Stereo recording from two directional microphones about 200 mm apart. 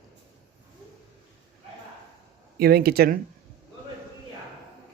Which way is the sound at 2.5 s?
50° right (ahead or behind).